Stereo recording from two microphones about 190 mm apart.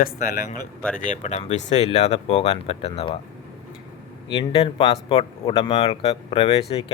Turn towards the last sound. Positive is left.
turn(degrees=30)  # may be behind; listen again after turning